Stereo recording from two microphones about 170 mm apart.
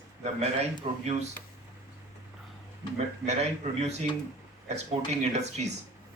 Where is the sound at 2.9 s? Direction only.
40° right (ahead or behind).